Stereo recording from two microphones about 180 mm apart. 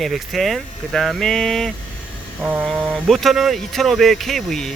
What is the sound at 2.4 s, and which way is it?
Speech, 10° right (ahead or behind).